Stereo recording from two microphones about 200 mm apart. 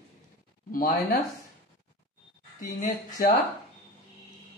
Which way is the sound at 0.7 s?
45° left (ahead or behind).